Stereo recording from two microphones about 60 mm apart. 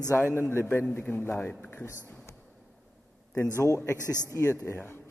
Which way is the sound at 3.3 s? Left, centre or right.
Left.